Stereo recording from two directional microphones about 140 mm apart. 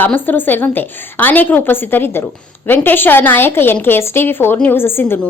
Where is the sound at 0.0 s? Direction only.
15° left (ahead or behind).